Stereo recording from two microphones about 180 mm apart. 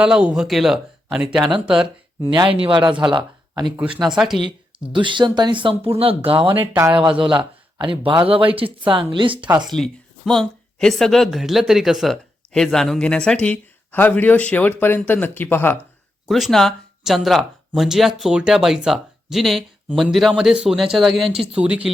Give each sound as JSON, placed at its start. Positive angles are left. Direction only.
{"t": 0.0, "sound": "a woman's voice", "side_deg": -5}
{"t": 1.5, "sound": "speech", "side_deg": -30}
{"t": 4.1, "sound": "a woman's voice", "side_deg": -5}
{"t": 4.9, "sound": "speech", "side_deg": -25}
{"t": 6.5, "sound": "speech", "side_deg": -15}
{"t": 7.2, "sound": "a man's voice", "side_deg": -25}
{"t": 9.5, "sound": "a woman's voice", "side_deg": 0}
{"t": 16.3, "sound": "a woman's voice", "side_deg": 0}